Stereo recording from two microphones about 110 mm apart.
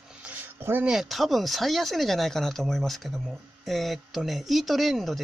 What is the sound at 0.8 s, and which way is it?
Speech, centre (ahead or behind).